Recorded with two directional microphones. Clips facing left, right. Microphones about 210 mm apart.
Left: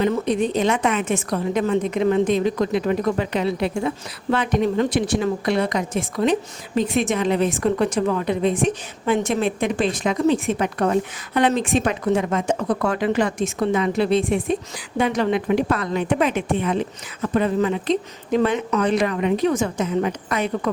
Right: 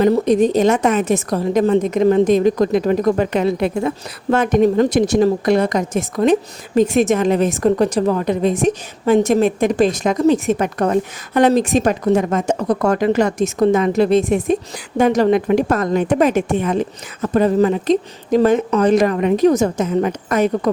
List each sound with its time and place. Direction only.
0.0 s a woman's voice: 40° right (ahead or behind)